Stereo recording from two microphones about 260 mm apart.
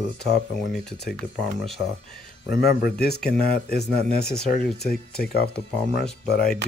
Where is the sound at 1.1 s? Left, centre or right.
Centre.